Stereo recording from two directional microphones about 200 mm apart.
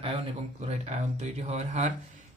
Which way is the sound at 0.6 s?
35° right (ahead or behind).